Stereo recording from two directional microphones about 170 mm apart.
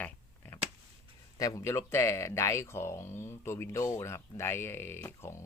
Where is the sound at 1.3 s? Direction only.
20° left (ahead or behind).